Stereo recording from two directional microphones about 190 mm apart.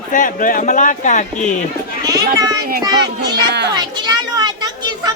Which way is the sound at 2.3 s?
20° right (ahead or behind).